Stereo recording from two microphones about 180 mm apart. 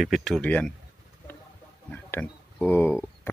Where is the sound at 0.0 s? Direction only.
Centre (ahead or behind).